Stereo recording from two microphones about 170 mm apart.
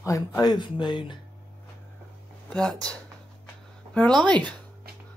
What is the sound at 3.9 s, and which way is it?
Speech, 5° left (ahead or behind).